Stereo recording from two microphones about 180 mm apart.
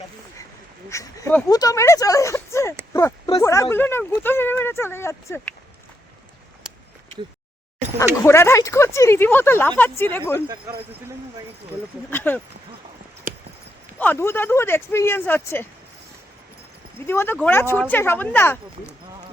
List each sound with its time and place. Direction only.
0.9 s speech: 15° left (ahead or behind)
2.9 s a sound: 15° left (ahead or behind)
3.4 s speech: 15° left (ahead or behind)
8.2 s speech: 15° left (ahead or behind)
12.1 s speech: 10° left (ahead or behind)
13.3 s a sound: 50° right (ahead or behind)
14.0 s speech: 10° left (ahead or behind)
17.1 s speech: 10° left (ahead or behind)